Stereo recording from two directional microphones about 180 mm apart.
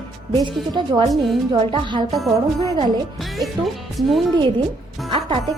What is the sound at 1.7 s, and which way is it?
Speech, 25° right (ahead or behind).